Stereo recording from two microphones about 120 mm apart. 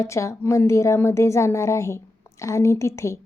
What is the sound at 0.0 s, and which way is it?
A woman's voice, 25° left (ahead or behind).